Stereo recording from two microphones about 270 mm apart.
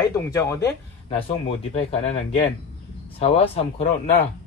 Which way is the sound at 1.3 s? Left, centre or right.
Left.